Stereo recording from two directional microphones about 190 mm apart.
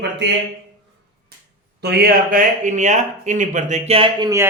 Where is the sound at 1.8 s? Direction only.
55° right (ahead or behind); by 4.3 s 30° right (ahead or behind).